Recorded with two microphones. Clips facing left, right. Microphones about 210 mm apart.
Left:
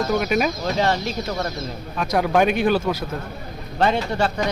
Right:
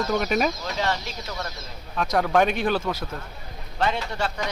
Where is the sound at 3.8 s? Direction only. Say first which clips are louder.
Left 6 dB; 50° left (ahead or behind).